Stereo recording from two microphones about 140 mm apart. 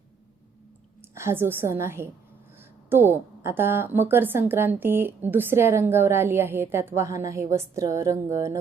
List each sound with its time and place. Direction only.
1.1 s a woman's voice: 20° right (ahead or behind)